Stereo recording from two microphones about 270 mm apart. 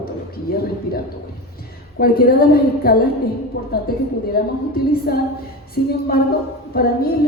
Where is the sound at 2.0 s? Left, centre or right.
Left.